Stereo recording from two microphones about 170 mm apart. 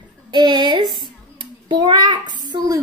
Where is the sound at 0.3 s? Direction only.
25° right (ahead or behind).